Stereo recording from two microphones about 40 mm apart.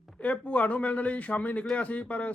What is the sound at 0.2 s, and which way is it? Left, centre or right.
Speech, left.